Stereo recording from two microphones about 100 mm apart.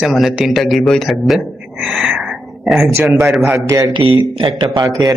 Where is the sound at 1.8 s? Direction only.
10° right (ahead or behind).